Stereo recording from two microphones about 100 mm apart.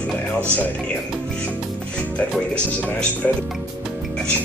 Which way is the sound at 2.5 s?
15° left (ahead or behind).